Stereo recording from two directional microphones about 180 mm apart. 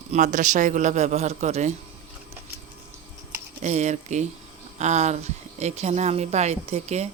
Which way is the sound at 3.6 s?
40° right (ahead or behind).